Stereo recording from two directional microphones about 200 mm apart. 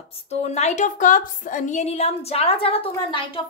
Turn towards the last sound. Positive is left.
turn(degrees=25)  # may be behind; listen again after turning